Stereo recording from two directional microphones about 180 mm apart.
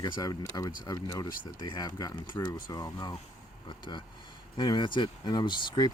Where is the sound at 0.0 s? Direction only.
20° left (ahead or behind).